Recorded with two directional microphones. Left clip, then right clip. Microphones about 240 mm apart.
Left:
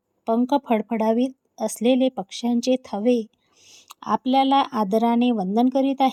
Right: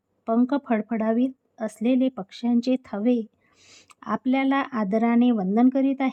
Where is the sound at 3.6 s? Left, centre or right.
Right.